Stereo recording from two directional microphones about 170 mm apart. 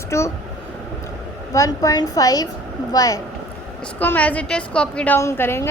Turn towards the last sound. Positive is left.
turn(degrees=15)  # may be behind; listen again after turning